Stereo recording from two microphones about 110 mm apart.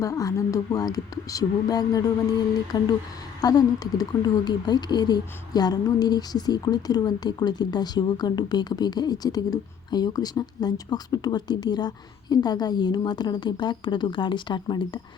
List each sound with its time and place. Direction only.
0.0 s speech: 30° left (ahead or behind)